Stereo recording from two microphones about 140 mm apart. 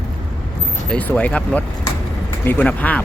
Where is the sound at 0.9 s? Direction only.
10° left (ahead or behind).